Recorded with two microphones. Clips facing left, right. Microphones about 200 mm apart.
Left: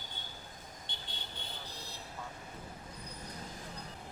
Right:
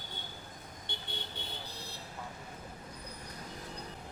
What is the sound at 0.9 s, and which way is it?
Vehicle, 60° right (ahead or behind).